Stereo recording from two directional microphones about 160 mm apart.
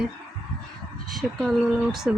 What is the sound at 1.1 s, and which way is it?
Speech, centre (ahead or behind).